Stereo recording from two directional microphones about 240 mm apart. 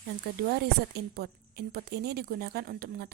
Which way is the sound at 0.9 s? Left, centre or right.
Right.